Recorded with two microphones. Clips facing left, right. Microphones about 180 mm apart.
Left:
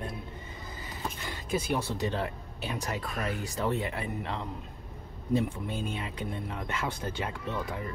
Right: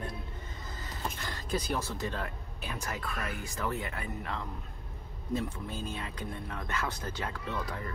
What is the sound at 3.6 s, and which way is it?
Speech, 20° left (ahead or behind).